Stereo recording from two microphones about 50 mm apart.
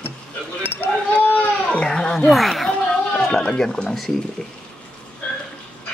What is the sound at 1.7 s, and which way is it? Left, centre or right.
Children playing, centre.